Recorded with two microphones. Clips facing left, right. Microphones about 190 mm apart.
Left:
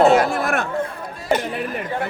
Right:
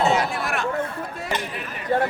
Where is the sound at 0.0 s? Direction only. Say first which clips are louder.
Left 7 dB; 50° left (ahead or behind).